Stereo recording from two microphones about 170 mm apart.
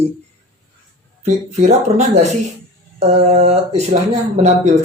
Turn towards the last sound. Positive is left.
turn(degrees=-40)  # may be behind; listen again after turning